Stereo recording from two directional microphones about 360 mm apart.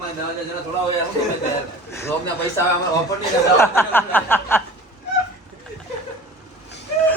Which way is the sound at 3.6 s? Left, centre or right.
Centre.